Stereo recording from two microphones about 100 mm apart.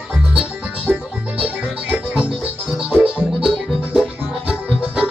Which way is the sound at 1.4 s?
10° right (ahead or behind).